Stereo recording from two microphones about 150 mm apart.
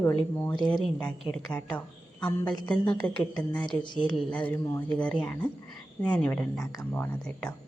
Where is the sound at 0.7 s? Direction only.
5° left (ahead or behind).